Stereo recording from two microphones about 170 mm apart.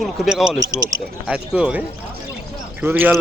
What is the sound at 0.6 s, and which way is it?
Speech, 20° right (ahead or behind).